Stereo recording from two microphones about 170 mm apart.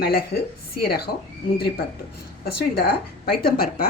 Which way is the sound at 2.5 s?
65° left (ahead or behind).